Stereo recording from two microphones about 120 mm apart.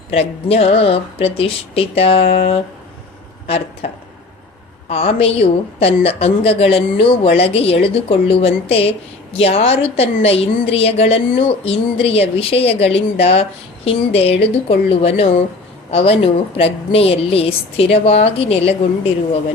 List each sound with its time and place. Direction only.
0.1 s a woman's voice: 55° left (ahead or behind)
3.8 s a woman's voice: 55° left (ahead or behind)